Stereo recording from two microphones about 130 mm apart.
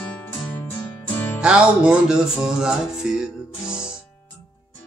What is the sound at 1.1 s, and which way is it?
Music, 15° left (ahead or behind).